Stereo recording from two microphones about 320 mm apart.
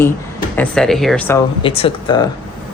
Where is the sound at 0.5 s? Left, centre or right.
Centre.